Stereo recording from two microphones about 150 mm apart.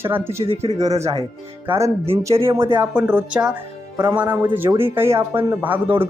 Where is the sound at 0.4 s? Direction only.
40° right (ahead or behind).